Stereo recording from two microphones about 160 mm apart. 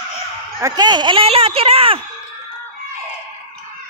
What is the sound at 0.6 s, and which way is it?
Speech, 25° right (ahead or behind).